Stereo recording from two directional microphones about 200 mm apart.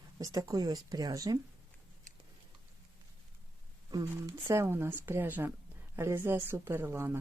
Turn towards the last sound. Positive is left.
turn(degrees=-10)  # may be behind; listen again after turning